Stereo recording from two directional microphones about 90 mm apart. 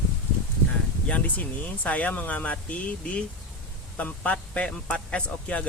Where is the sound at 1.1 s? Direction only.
15° left (ahead or behind).